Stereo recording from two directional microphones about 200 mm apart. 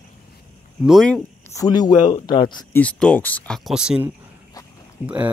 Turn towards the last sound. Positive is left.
turn(degrees=-5)  # may be behind; listen again after turning